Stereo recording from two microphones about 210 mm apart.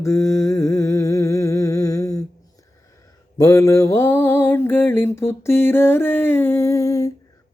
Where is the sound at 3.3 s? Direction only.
15° left (ahead or behind).